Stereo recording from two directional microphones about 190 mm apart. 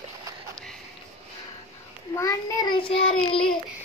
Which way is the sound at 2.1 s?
15° left (ahead or behind).